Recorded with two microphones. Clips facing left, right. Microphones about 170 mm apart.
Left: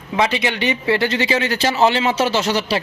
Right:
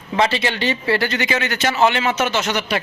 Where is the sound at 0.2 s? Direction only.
15° left (ahead or behind).